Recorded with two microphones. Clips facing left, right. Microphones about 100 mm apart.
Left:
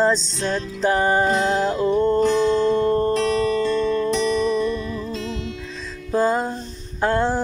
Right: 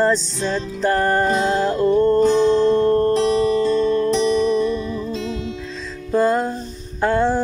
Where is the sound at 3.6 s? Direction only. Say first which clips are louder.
Right 3 dB; 15° right (ahead or behind).